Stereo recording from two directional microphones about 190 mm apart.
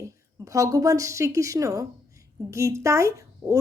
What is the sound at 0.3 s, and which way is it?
A woman's voice, 15° right (ahead or behind).